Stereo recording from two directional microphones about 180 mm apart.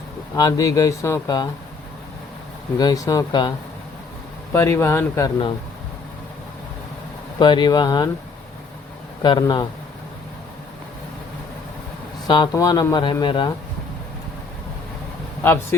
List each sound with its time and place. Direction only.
0.3 s speech: 20° left (ahead or behind)
2.7 s speech: 20° left (ahead or behind)
4.5 s speech: 15° left (ahead or behind)
7.3 s speech: 25° left (ahead or behind)
9.2 s speech: 25° left (ahead or behind)
12.3 s speech: 25° left (ahead or behind)
15.4 s speech: 10° left (ahead or behind)